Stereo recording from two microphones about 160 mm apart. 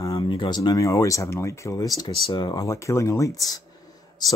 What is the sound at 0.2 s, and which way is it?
Speech, 30° left (ahead or behind).